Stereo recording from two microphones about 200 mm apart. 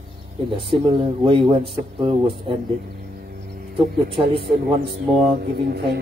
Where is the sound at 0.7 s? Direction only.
25° right (ahead or behind).